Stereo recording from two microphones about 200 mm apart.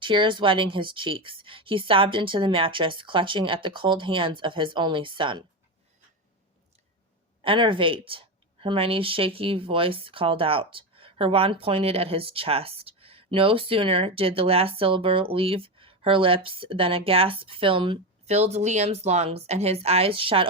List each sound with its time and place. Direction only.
0.0 s speech: 25° right (ahead or behind)
7.4 s a woman's voice: 25° right (ahead or behind)